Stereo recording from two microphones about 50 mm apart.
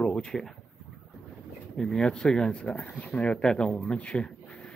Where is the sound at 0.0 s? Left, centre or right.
Centre.